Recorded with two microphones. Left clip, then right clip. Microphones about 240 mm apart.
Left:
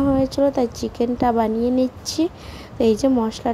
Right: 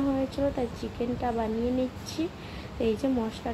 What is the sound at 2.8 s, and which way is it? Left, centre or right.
Speech, left.